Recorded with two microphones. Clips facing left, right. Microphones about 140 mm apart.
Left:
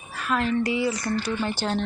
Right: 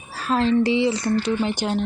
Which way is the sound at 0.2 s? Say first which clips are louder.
Right 5 dB; 30° right (ahead or behind).